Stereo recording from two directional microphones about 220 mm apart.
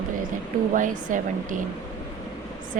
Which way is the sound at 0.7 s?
35° right (ahead or behind).